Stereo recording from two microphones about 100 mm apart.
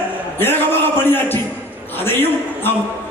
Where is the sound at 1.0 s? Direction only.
20° left (ahead or behind).